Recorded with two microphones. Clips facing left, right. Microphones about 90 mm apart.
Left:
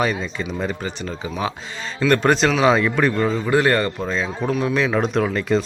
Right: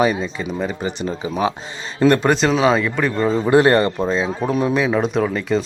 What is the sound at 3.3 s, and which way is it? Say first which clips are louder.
Speech: right 4 dB; 30° right (ahead or behind).